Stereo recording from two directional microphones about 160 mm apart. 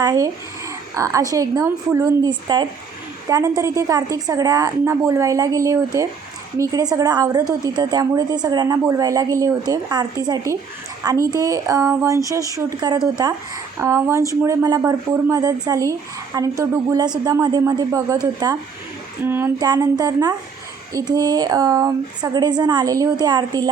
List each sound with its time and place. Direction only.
0.0 s speech: 25° right (ahead or behind)
19.5 s speech: 25° right (ahead or behind)